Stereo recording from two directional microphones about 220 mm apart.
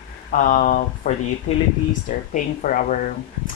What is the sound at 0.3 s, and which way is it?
Speech, 35° left (ahead or behind).